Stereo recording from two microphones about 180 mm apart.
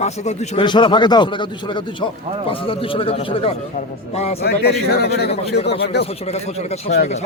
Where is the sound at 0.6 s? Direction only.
25° left (ahead or behind).